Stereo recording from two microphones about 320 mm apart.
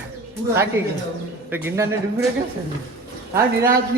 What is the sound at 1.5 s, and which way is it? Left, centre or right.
Speech, centre.